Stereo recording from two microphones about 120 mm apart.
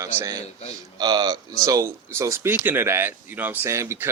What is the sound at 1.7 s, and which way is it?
Speech, 25° right (ahead or behind).